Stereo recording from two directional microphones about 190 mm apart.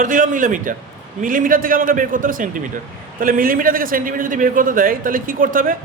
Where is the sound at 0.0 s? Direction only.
45° right (ahead or behind).